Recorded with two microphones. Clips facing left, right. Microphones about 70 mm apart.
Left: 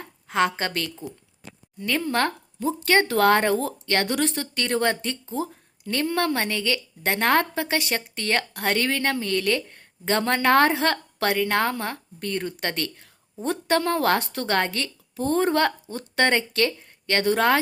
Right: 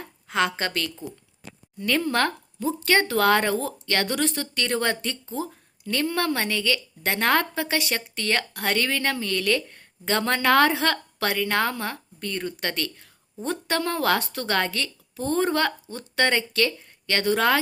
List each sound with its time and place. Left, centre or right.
0.0 s a woman's voice: left
2.0 s a woman's voice: left